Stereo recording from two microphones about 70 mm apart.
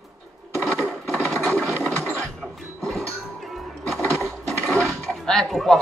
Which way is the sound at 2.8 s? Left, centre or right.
Centre.